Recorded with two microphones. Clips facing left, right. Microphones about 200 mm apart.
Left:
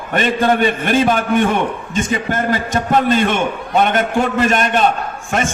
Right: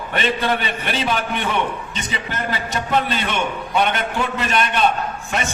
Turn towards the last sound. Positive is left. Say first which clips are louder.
# left 4 dB
turn(degrees=50)  # may be behind; listen again after turning